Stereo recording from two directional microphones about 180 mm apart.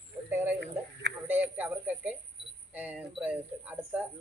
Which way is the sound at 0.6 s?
70° right (ahead or behind).